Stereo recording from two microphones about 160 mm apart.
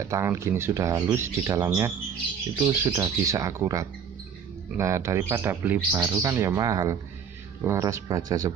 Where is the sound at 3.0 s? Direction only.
20° right (ahead or behind).